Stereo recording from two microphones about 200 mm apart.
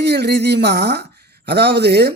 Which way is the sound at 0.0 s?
55° right (ahead or behind).